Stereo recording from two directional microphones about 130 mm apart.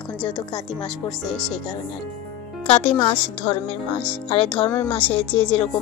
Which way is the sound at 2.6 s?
50° left (ahead or behind).